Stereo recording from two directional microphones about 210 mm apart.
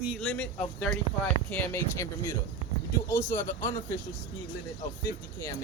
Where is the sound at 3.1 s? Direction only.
10° left (ahead or behind).